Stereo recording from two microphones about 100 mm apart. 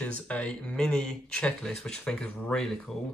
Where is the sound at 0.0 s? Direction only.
15° left (ahead or behind).